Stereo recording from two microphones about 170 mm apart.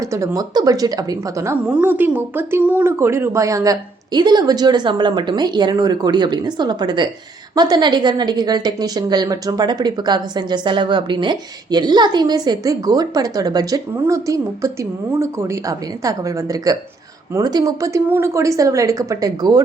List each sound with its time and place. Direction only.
0.0 s speech: 15° right (ahead or behind)
1.6 s a woman's voice: 10° right (ahead or behind)